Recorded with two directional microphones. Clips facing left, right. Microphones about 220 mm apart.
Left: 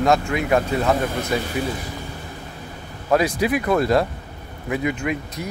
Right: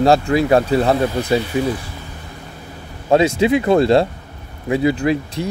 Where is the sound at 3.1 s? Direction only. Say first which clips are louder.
Right 5 dB; 25° right (ahead or behind).